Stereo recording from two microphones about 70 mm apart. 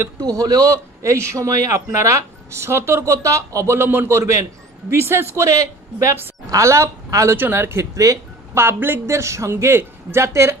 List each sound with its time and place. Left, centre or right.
0.2 s a man's voice: right
4.1 s a man's voice: right
7.2 s speech: right
7.9 s speech: right
8.5 s speech: right